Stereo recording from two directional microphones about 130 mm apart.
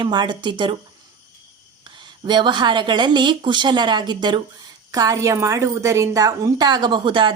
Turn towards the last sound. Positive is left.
turn(degrees=-40)  # may be behind; listen again after turning